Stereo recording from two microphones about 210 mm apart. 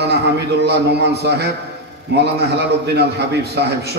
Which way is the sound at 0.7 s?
50° right (ahead or behind).